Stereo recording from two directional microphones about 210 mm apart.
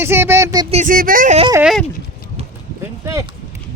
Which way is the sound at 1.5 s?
5° right (ahead or behind).